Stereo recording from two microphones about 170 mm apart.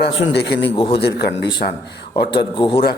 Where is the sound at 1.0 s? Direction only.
75° left (ahead or behind).